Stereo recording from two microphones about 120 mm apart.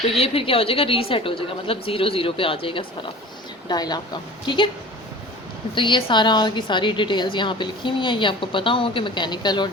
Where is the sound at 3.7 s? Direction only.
35° left (ahead or behind).